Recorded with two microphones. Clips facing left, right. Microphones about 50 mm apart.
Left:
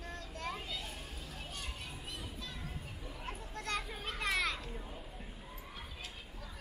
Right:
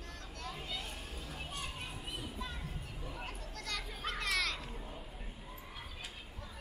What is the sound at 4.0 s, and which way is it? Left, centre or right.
Children playing, centre.